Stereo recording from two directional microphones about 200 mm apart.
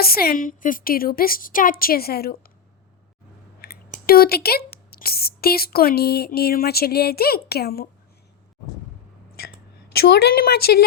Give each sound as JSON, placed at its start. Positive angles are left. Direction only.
{"t": 0.0, "sound": "speech", "side_deg": 50}
{"t": 3.6, "sound": "a sound", "side_deg": 50}
{"t": 4.0, "sound": "speech", "side_deg": 50}
{"t": 9.9, "sound": "speech", "side_deg": 55}